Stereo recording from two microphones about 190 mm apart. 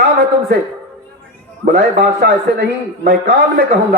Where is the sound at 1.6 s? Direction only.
60° right (ahead or behind).